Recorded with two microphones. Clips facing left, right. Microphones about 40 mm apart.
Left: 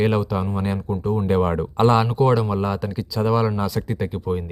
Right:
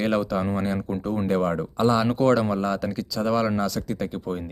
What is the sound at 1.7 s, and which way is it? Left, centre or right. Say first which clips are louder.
Speech: left 5 dB; left.